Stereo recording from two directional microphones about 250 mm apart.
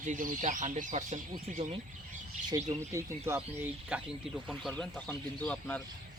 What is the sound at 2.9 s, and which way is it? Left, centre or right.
Speech, centre.